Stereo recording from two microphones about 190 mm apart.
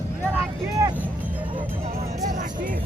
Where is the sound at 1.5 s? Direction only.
30° right (ahead or behind).